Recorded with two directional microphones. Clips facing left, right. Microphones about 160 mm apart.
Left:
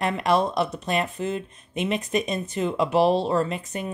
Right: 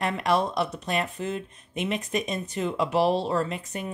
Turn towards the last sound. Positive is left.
turn(degrees=25)  # may be behind; listen again after turning